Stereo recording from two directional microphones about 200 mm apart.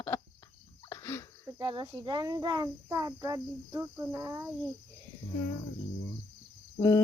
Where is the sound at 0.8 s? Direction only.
15° left (ahead or behind).